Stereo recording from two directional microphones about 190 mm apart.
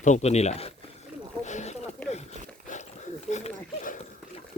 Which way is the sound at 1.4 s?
35° left (ahead or behind).